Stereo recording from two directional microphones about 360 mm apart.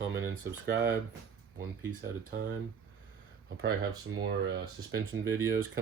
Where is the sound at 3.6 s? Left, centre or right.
Right.